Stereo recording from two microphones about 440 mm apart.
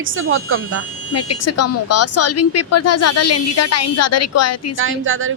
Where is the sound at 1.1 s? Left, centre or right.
Left.